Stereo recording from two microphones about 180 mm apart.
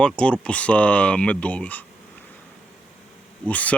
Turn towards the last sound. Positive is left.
turn(degrees=10)  # may be behind; listen again after turning